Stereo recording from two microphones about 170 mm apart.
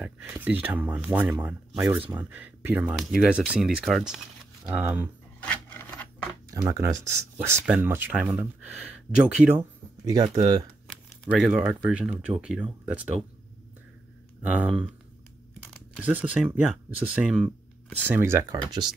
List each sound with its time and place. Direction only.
0.0 s speech: 10° right (ahead or behind)
5.4 s filing: 10° left (ahead or behind)
6.5 s speech: 15° right (ahead or behind)
10.9 s speech: 5° right (ahead or behind)
14.4 s speech: 5° right (ahead or behind)
16.0 s speech: 10° right (ahead or behind)
18.2 s speech: 15° right (ahead or behind)